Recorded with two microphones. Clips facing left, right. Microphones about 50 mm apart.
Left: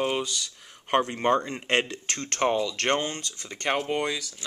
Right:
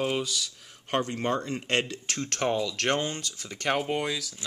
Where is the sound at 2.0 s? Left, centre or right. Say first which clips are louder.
Left 3 dB; centre.